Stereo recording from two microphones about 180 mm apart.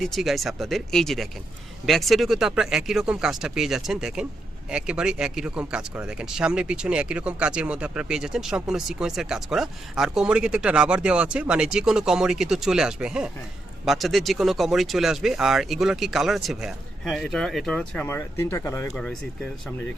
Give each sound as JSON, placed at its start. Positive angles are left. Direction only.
{"t": 0.0, "sound": "speech", "side_deg": 0}